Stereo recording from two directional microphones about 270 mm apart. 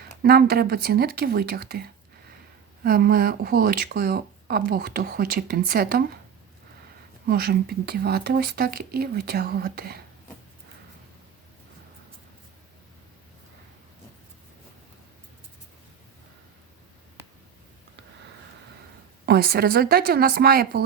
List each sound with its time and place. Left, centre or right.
0.2 s speech: right
7.3 s speech: right
19.2 s speech: right